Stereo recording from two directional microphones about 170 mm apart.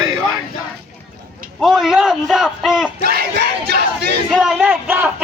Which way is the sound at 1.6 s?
Centre (ahead or behind).